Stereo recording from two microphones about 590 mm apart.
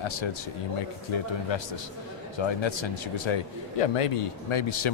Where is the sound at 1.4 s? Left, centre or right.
Left.